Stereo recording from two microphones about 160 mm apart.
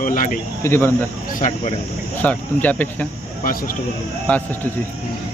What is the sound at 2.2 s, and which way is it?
Speech, 10° left (ahead or behind).